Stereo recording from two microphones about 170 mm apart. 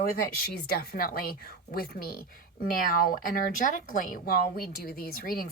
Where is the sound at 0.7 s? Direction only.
60° left (ahead or behind).